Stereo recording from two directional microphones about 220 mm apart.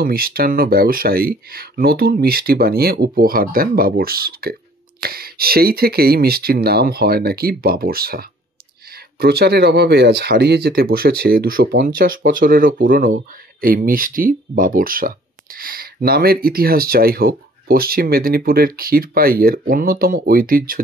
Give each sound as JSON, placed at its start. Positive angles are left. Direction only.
{"t": 0.0, "sound": "speech", "side_deg": -45}